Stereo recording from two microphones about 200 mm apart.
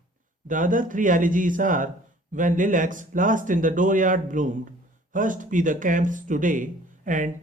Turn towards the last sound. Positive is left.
turn(degrees=-40)  # may be behind; listen again after turning